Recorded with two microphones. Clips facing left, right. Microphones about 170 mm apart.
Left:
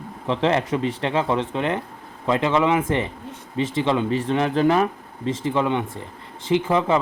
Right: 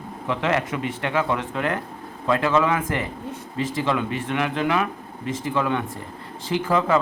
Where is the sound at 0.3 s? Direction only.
30° left (ahead or behind).